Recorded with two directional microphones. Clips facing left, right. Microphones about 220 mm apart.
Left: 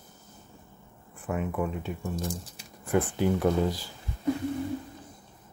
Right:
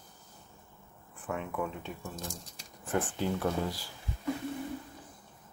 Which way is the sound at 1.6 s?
5° left (ahead or behind).